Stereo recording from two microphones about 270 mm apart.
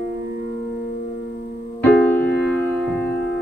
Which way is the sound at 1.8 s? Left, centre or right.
Centre.